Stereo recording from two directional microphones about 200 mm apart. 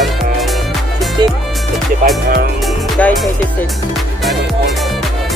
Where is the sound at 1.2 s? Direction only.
20° right (ahead or behind).